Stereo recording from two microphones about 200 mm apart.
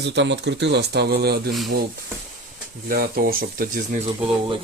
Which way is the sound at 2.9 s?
45° right (ahead or behind).